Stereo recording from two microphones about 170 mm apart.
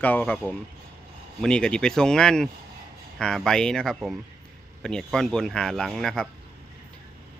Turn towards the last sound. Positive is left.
turn(degrees=5)  # may be behind; listen again after turning